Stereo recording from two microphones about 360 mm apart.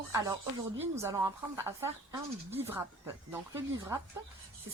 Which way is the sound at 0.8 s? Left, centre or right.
Centre.